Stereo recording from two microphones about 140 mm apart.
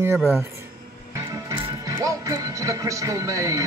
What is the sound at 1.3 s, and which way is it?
Music, 25° right (ahead or behind).